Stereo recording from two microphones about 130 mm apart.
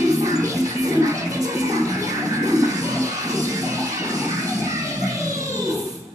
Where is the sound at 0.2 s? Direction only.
25° right (ahead or behind).